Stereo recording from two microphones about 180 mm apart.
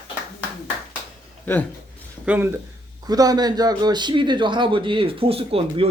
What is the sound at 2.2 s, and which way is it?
Speech, 10° right (ahead or behind).